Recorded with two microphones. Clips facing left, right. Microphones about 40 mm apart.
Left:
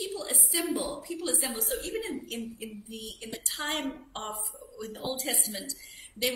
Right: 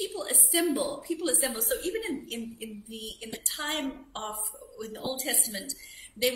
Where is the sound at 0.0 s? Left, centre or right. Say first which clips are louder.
Right 1 dB; right.